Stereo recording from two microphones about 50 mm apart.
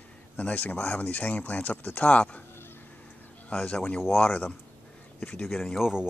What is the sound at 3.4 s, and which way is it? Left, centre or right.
Speech, left.